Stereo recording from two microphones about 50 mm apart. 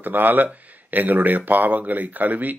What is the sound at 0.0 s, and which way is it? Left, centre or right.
Speech, right.